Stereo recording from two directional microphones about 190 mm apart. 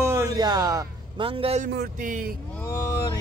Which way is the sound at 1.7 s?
50° right (ahead or behind).